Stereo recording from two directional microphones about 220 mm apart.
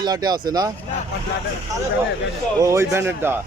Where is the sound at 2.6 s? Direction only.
10° right (ahead or behind).